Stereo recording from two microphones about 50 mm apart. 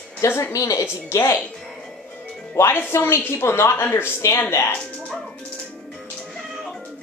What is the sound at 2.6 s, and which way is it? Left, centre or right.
A woman's voice, left.